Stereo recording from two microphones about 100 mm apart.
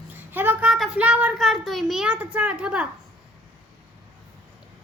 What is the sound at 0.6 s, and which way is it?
Child singing, 5° right (ahead or behind).